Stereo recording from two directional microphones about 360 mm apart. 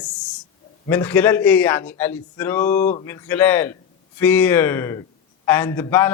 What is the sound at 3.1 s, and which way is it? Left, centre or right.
A man's voice, centre.